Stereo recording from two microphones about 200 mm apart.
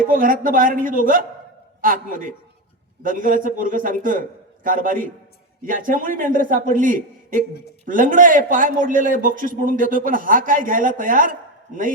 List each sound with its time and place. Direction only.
0.1 s a man's voice: 45° right (ahead or behind)